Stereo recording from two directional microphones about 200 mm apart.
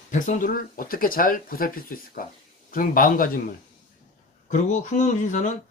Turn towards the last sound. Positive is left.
turn(degrees=40)  # may be behind; listen again after turning